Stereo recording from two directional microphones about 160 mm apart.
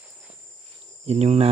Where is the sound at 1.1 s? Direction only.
45° right (ahead or behind).